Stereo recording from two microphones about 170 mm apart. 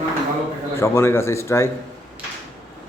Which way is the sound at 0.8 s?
15° left (ahead or behind).